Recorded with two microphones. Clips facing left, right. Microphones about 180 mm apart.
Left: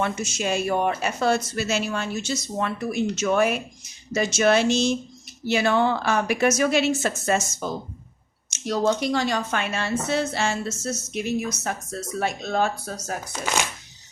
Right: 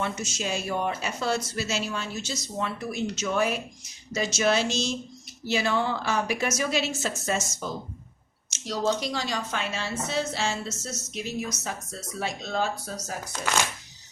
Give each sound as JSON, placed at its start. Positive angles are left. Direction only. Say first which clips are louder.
{"t": 0.0, "sound": "a woman's voice", "louder": "left 5 dB", "side_deg": 60}
{"t": 8.4, "sound": "a woman's voice", "louder": "left 4 dB", "side_deg": 55}